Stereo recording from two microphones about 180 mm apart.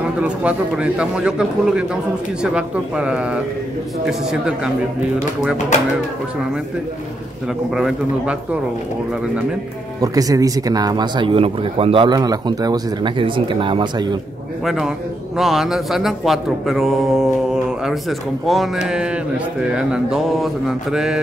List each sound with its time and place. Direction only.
0.2 s speech: 5° right (ahead or behind)
7.7 s speech: 5° right (ahead or behind)
9.9 s speech: 20° right (ahead or behind)
15.3 s speech: centre (ahead or behind)